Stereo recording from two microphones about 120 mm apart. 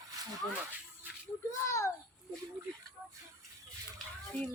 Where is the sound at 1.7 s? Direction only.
25° left (ahead or behind).